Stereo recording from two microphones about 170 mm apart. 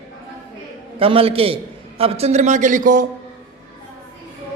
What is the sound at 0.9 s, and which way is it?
A man's voice, 35° right (ahead or behind).